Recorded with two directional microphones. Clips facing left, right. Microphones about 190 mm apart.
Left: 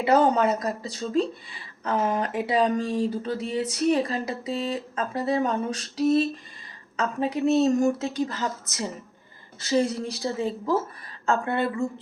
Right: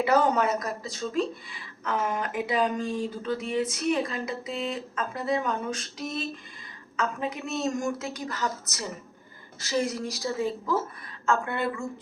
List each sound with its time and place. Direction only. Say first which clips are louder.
0.0 s speech: left 3 dB; 30° left (ahead or behind)
9.6 s speech: left 4 dB; 30° left (ahead or behind)